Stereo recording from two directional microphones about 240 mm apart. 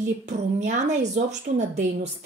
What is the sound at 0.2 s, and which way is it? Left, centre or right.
A woman's voice, right.